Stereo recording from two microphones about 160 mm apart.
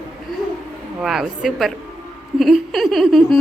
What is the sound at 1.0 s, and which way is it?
Speech, 5° right (ahead or behind).